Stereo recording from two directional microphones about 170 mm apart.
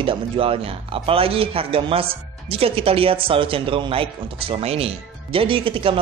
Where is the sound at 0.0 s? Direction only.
30° right (ahead or behind).